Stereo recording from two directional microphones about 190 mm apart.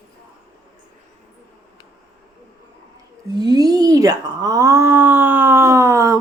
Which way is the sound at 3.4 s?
20° right (ahead or behind).